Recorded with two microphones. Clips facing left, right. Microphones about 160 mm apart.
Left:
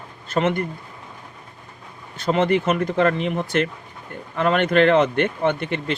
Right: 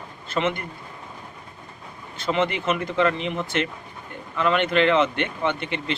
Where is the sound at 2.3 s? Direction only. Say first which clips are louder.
Left 4 dB; 45° left (ahead or behind).